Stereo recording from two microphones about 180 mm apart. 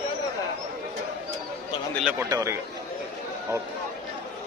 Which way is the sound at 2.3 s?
20° right (ahead or behind).